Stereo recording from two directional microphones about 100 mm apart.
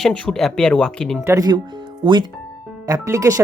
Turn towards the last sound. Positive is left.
turn(degrees=-30)  # may be behind; listen again after turning